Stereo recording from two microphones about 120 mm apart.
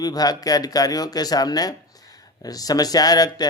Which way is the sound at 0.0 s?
30° left (ahead or behind).